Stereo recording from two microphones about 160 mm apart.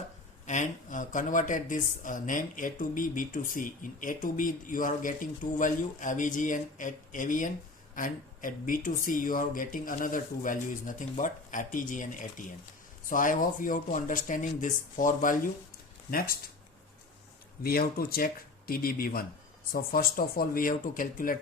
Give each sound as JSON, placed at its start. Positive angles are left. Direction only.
{"t": 0.4, "sound": "speech", "side_deg": 50}
{"t": 17.6, "sound": "speech", "side_deg": 70}